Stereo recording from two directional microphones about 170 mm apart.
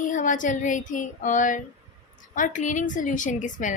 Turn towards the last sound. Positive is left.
turn(degrees=50)  # may be behind; listen again after turning